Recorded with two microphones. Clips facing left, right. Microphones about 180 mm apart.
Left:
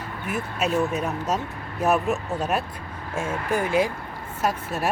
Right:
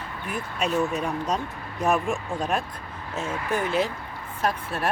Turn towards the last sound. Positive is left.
turn(degrees=10)  # may be behind; listen again after turning